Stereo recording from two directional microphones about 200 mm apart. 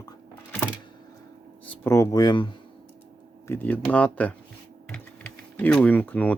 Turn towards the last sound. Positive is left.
turn(degrees=10)  # may be behind; listen again after turning